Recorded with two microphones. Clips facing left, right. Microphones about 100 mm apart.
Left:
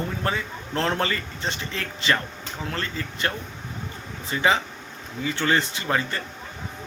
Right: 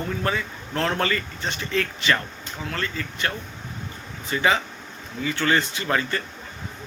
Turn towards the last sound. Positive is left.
turn(degrees=25)  # may be behind; listen again after turning